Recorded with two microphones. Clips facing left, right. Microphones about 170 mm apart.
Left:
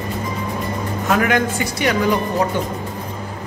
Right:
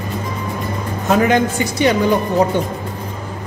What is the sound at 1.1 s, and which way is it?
Speech, 25° right (ahead or behind).